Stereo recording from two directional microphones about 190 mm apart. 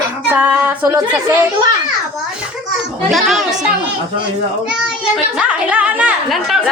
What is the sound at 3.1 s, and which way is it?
Speech, centre (ahead or behind).